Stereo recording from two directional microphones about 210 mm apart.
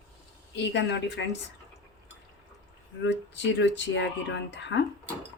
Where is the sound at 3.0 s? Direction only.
60° left (ahead or behind).